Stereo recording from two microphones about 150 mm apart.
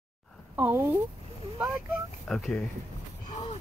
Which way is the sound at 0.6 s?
15° right (ahead or behind).